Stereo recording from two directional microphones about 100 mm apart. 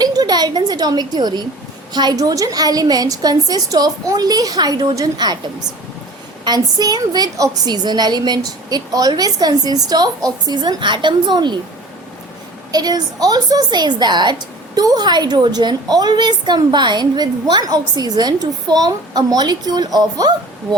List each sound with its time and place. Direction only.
0.0 s a woman's voice: 40° right (ahead or behind)
12.7 s a woman's voice: 40° right (ahead or behind)